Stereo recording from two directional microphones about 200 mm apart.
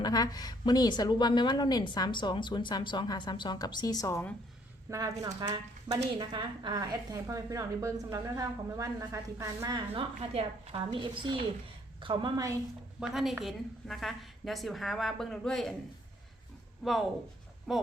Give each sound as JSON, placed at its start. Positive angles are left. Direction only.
{"t": 0.0, "sound": "a woman's voice", "side_deg": 20}
{"t": 4.9, "sound": "a woman's voice", "side_deg": -15}
{"t": 13.0, "sound": "a woman's voice", "side_deg": -5}
{"t": 16.8, "sound": "a woman's voice", "side_deg": 0}